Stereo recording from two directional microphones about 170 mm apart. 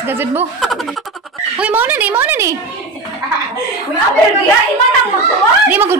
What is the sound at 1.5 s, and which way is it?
A woman's voice, 10° right (ahead or behind).